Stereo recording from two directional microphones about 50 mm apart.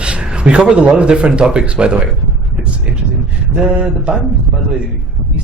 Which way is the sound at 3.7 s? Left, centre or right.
Right.